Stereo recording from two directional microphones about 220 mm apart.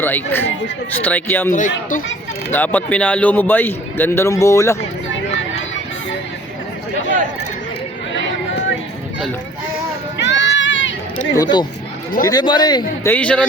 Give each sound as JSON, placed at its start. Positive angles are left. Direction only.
{"t": 0.0, "sound": "a man's voice", "side_deg": 10}
{"t": 10.2, "sound": "run", "side_deg": 55}
{"t": 11.3, "sound": "a man's voice", "side_deg": 20}
{"t": 13.1, "sound": "speech", "side_deg": 5}